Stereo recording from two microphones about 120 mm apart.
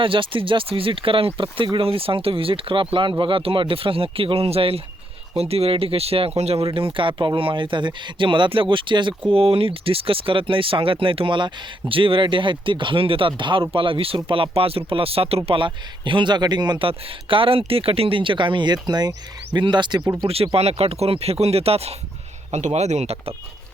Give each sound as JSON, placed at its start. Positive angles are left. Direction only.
{"t": 0.0, "sound": "speech", "side_deg": -45}
{"t": 20.2, "sound": "speech", "side_deg": -55}